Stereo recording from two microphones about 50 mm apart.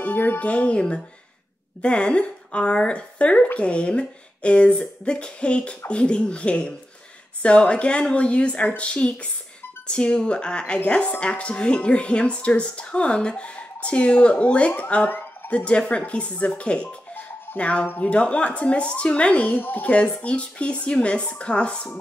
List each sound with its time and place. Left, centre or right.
0.0 s speech: left
15.0 s a sound: left
15.5 s speech: left
17.8 s speech: left
18.1 s speech: left
19.5 s speech: left
19.9 s speech: left